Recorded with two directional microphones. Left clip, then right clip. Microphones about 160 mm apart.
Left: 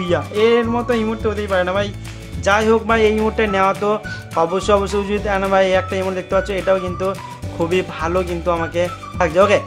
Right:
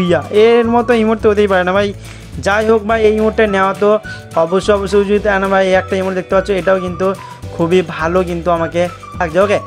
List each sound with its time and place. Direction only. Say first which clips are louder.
0.0 s speech: right 6 dB; 40° right (ahead or behind)